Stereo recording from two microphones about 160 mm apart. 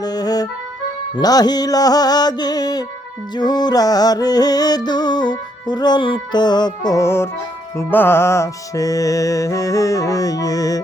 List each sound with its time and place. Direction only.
0.0 s music: 25° left (ahead or behind)